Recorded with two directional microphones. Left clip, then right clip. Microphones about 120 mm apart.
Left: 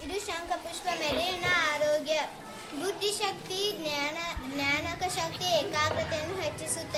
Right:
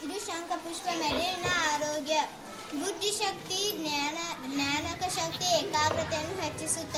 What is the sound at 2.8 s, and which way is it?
A child's voice, 15° left (ahead or behind).